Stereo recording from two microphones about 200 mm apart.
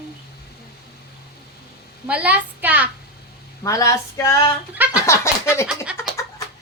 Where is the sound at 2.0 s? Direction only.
5° right (ahead or behind).